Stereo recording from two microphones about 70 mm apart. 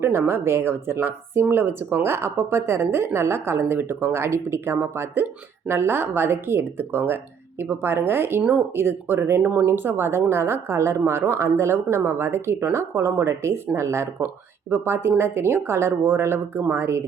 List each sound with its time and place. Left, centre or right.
0.0 s a woman's voice: right
14.7 s a woman's voice: right